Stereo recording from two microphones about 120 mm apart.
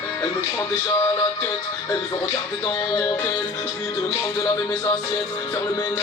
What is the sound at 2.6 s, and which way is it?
Speech, 30° left (ahead or behind).